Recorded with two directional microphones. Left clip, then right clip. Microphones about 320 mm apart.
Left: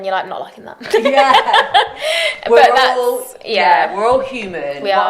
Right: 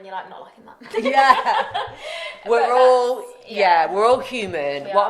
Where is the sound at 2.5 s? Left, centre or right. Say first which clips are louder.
Left 4 dB; right.